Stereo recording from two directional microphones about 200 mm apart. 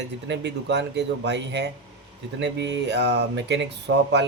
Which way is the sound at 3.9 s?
70° right (ahead or behind).